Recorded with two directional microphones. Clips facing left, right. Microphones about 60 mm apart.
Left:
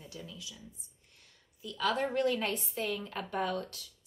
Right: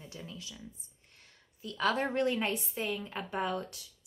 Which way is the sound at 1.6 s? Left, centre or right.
Right.